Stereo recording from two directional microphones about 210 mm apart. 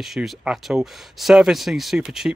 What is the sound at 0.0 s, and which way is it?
Speech, centre (ahead or behind).